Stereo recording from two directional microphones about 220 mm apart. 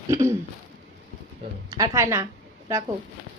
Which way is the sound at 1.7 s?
15° right (ahead or behind).